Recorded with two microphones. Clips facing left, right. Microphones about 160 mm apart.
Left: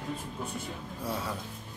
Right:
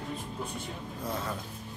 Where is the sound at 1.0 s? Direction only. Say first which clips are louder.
Left 1 dB; 10° left (ahead or behind).